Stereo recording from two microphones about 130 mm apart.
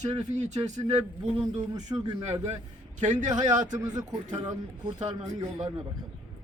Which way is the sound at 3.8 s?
30° right (ahead or behind).